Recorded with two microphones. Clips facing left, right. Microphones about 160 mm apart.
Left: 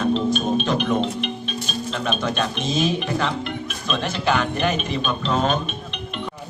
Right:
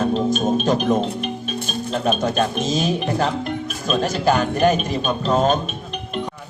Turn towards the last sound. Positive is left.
turn(degrees=-40)  # may be behind; listen again after turning